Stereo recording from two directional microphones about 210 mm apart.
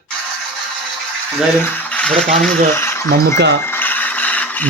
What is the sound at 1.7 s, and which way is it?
Speech, 5° left (ahead or behind).